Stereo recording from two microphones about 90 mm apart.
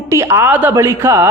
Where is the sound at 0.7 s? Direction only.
35° right (ahead or behind).